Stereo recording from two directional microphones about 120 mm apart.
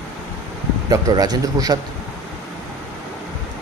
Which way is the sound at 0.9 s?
35° right (ahead or behind).